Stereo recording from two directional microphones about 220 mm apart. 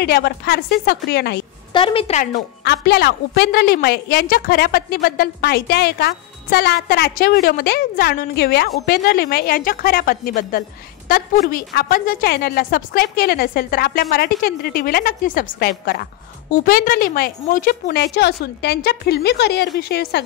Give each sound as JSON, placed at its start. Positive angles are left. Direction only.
{"t": 0.0, "sound": "a woman's voice", "side_deg": 45}
{"t": 1.7, "sound": "a woman's voice", "side_deg": 25}
{"t": 2.6, "sound": "a woman's voice", "side_deg": 50}